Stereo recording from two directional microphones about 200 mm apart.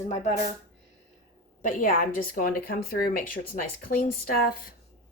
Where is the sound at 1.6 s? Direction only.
45° left (ahead or behind).